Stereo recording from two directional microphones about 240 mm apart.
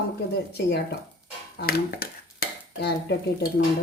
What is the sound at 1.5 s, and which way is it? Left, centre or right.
Dishes, left.